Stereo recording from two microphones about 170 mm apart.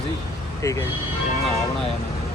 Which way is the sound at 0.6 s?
20° left (ahead or behind).